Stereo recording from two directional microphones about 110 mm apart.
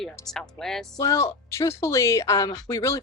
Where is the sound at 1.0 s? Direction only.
30° left (ahead or behind).